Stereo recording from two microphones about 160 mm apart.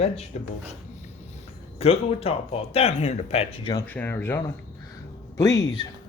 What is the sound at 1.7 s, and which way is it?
Speech, 35° left (ahead or behind).